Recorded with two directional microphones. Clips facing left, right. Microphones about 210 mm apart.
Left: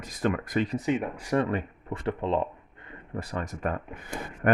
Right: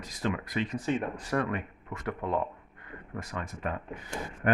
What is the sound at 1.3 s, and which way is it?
Speech, 30° left (ahead or behind).